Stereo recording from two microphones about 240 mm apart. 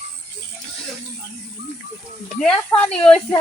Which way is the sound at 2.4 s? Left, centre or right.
Centre.